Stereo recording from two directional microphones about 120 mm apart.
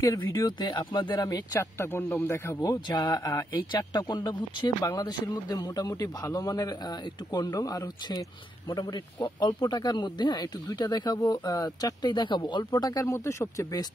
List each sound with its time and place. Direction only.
0.2 s speech: 20° left (ahead or behind)
0.5 s a man's voice: 40° left (ahead or behind)